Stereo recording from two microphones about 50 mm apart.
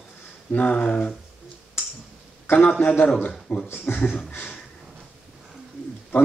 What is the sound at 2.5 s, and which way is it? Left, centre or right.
Speech, left.